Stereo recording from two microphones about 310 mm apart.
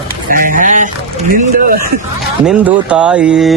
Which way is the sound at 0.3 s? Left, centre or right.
Right.